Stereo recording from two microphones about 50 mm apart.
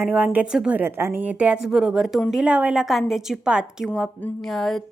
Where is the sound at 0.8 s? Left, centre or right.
Right.